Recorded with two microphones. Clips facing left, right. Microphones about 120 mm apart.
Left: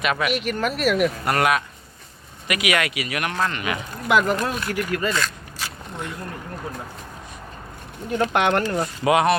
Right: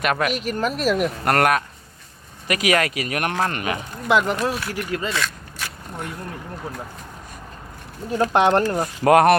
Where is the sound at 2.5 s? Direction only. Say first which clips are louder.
Right 3 dB; 35° right (ahead or behind).